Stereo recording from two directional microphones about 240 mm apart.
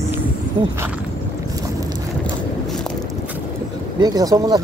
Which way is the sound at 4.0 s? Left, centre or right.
Centre.